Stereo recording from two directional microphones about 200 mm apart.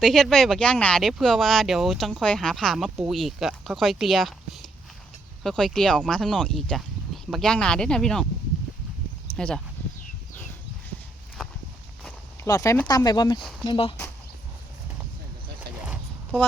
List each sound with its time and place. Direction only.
0.0 s speech: centre (ahead or behind)
9.3 s speech: 5° left (ahead or behind)
12.5 s speech: 15° left (ahead or behind)
13.4 s speech: centre (ahead or behind)
13.7 s speech: 25° left (ahead or behind)
15.8 s a sound: 5° right (ahead or behind)